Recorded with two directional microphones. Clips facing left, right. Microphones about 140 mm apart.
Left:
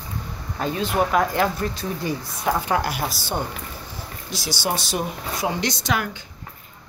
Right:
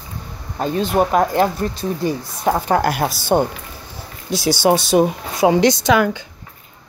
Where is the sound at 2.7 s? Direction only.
50° right (ahead or behind); by 6.0 s 85° right.